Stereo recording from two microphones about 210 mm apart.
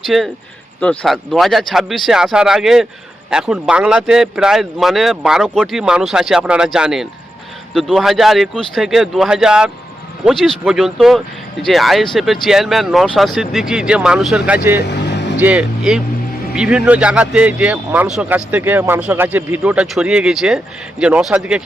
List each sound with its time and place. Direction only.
0.0 s speech: centre (ahead or behind)
14.8 s vehicle: 55° left (ahead or behind)
15.4 s speech: 5° right (ahead or behind)